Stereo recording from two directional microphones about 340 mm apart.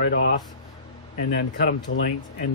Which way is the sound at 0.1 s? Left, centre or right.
Left.